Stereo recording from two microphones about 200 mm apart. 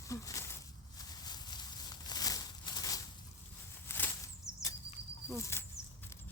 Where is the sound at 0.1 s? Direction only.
15° left (ahead or behind).